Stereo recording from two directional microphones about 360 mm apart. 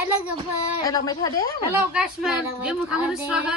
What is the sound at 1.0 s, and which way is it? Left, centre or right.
Speech, centre.